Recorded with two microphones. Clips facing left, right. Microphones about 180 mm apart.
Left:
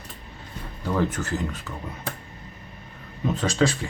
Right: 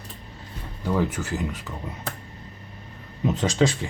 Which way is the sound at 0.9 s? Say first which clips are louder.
Even; 10° right (ahead or behind).